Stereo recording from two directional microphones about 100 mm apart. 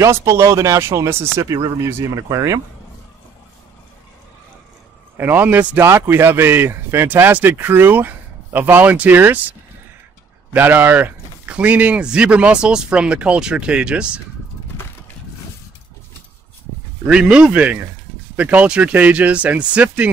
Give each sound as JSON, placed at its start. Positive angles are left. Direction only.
{"t": 0.0, "sound": "speech", "side_deg": -30}
{"t": 5.1, "sound": "speech", "side_deg": -20}
{"t": 17.1, "sound": "speech", "side_deg": -10}